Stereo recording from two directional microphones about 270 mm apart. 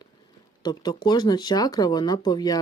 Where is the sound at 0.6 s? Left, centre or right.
Centre.